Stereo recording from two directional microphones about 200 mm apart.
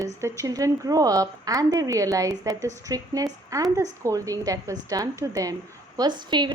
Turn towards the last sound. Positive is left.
turn(degrees=-20)  # may be behind; listen again after turning